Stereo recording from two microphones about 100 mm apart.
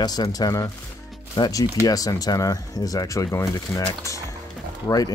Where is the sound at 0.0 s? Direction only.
40° left (ahead or behind).